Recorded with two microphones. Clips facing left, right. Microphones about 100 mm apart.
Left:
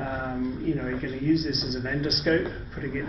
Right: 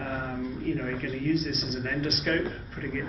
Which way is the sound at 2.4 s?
Centre (ahead or behind).